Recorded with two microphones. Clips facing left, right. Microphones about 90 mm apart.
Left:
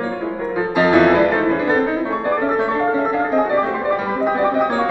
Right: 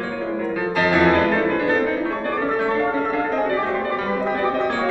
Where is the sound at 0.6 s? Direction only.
20° left (ahead or behind).